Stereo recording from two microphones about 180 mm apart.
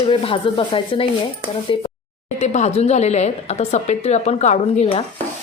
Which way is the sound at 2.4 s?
40° left (ahead or behind).